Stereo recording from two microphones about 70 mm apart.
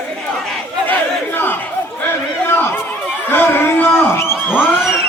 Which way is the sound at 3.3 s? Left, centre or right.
Left.